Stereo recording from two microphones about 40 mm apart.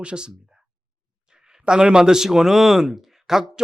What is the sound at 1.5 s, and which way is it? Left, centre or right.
Speech, centre.